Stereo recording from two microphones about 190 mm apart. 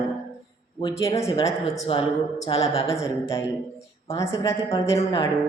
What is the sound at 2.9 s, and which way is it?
A woman's voice, 15° left (ahead or behind).